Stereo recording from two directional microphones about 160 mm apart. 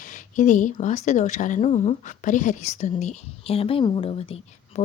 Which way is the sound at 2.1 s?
50° left (ahead or behind).